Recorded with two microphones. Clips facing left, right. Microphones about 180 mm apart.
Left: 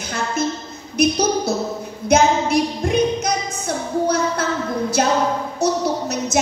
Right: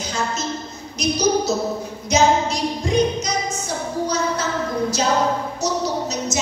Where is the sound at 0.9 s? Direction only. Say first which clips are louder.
Left 2 dB; 55° left (ahead or behind).